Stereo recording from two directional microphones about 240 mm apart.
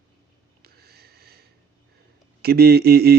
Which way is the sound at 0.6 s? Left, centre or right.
Right.